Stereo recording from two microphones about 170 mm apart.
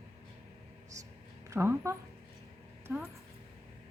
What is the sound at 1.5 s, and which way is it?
A woman's voice, 15° right (ahead or behind).